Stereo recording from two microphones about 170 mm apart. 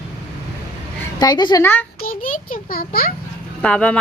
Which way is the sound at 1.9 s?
55° left (ahead or behind).